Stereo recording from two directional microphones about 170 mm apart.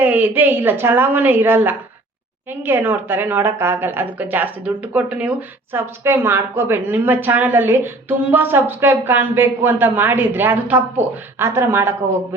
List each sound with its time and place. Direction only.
0.0 s a woman's voice: 10° right (ahead or behind)